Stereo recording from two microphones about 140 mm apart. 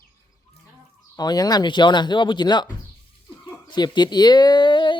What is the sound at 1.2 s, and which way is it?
Speech, 30° left (ahead or behind).